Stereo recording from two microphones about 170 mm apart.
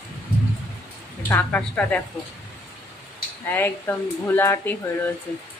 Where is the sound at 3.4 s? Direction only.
10° left (ahead or behind).